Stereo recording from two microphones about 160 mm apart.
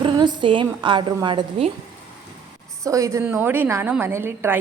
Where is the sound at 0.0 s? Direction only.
30° right (ahead or behind).